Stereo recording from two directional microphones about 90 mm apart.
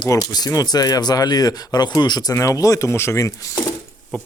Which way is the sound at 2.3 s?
35° left (ahead or behind).